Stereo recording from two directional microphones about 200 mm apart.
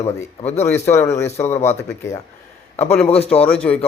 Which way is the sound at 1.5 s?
35° left (ahead or behind).